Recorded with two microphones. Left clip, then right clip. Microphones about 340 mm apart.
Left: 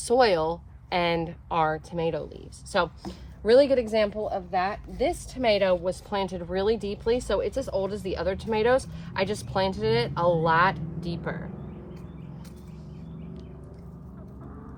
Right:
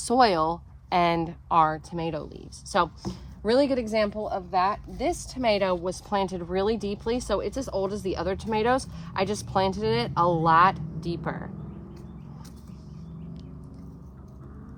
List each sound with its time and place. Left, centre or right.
0.0 s speech: centre